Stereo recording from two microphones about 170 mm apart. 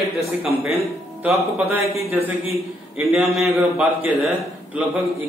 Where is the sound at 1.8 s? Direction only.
35° left (ahead or behind).